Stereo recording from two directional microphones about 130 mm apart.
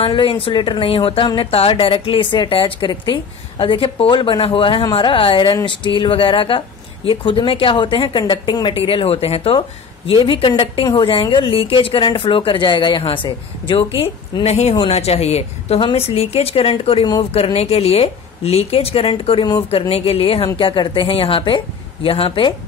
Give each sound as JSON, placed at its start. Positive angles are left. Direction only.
{"t": 0.0, "sound": "a woman's voice", "side_deg": 40}
{"t": 14.4, "sound": "a woman's voice", "side_deg": 55}